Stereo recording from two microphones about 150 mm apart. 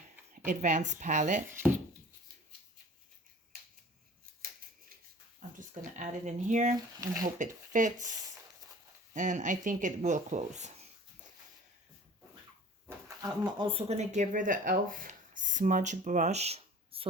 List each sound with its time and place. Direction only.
0.4 s speech: 55° right (ahead or behind)
5.4 s a sound: 55° right (ahead or behind)
7.2 s speech: 60° right (ahead or behind)
9.1 s speech: 55° right (ahead or behind)
13.1 s speech: 25° right (ahead or behind); by 17.1 s 40° right (ahead or behind)